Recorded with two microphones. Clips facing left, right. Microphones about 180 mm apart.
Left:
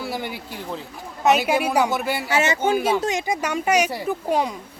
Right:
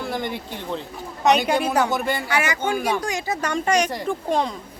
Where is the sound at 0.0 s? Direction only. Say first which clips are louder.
Right 2 dB; 10° left (ahead or behind).